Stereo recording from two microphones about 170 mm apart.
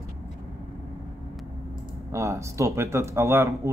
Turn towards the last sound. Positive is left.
turn(degrees=-15)  # may be behind; listen again after turning